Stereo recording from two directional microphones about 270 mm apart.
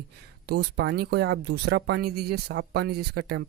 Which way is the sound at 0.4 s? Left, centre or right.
Right.